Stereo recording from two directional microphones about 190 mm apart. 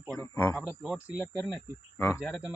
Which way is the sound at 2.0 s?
10° left (ahead or behind).